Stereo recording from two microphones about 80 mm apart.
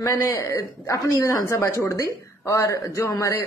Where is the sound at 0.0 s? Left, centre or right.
Left.